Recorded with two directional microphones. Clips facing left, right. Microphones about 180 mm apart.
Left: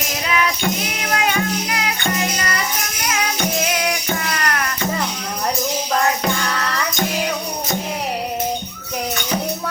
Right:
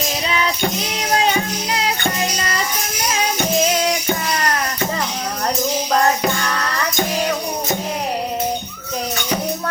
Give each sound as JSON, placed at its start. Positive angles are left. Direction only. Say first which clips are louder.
{"t": 0.3, "sound": "music", "louder": "left 2 dB", "side_deg": -30}
{"t": 3.1, "sound": "music", "louder": "right 2 dB", "side_deg": -30}